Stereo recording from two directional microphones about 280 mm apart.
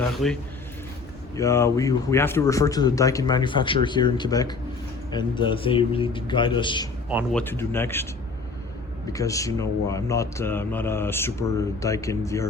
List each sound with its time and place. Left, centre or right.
0.2 s speech: centre
1.4 s speech: centre
7.1 s speech: centre
7.4 s speech: centre
9.1 s speech: centre